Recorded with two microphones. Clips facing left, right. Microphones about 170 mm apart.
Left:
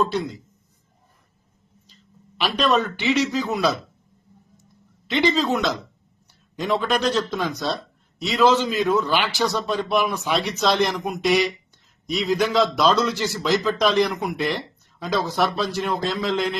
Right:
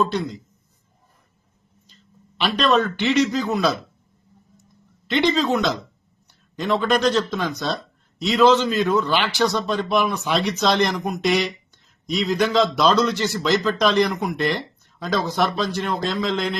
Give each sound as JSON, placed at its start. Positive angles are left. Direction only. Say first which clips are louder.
{"t": 0.0, "sound": "speech", "louder": "right 1 dB", "side_deg": 5}
{"t": 2.4, "sound": "speech", "louder": "right 2 dB", "side_deg": 5}
{"t": 5.0, "sound": "speech", "louder": "right 1 dB", "side_deg": 0}